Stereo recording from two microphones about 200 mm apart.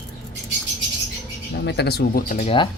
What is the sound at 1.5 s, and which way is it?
Speech, 60° left (ahead or behind).